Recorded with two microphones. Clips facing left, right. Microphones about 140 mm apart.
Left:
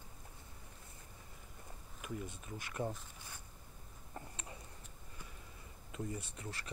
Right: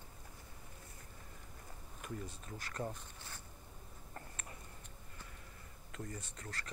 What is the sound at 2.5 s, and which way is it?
Speech, 10° left (ahead or behind).